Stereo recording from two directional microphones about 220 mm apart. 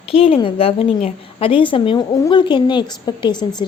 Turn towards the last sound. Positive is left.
turn(degrees=20)  # may be behind; listen again after turning